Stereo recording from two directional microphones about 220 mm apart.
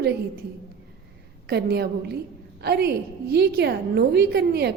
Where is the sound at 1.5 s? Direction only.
50° right (ahead or behind).